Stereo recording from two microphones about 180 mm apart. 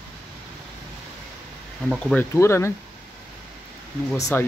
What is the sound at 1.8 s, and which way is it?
Speech, 5° left (ahead or behind).